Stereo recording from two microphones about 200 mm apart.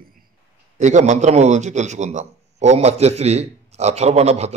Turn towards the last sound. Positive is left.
turn(degrees=-35)  # may be behind; listen again after turning